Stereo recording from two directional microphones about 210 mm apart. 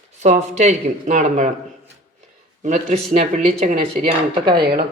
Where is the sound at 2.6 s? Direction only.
35° right (ahead or behind).